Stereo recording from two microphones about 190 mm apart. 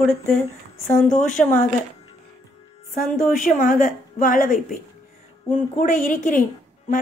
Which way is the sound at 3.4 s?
45° left (ahead or behind).